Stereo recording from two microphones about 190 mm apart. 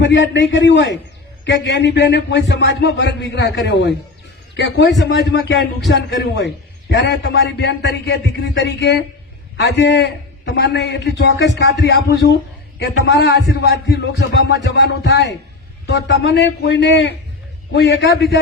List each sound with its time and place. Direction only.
0.0 s a man's voice: 70° left (ahead or behind)